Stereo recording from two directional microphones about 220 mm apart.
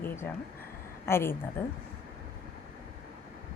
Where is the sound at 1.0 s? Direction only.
10° left (ahead or behind).